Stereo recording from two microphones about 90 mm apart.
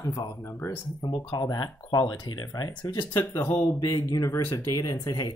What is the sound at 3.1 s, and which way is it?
Speech, 25° left (ahead or behind).